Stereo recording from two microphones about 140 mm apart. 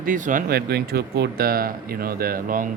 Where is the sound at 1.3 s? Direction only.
90° right.